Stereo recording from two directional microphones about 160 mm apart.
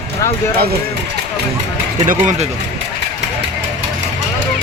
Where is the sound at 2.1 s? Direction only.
50° right (ahead or behind).